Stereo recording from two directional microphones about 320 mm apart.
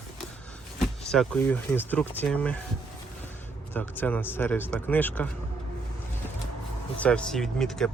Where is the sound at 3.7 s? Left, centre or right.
Centre.